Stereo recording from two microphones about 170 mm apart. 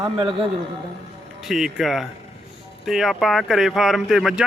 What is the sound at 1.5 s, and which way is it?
Speech, centre (ahead or behind).